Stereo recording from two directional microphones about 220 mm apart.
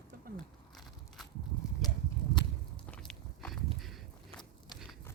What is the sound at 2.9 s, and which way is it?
Walk, 5° left (ahead or behind).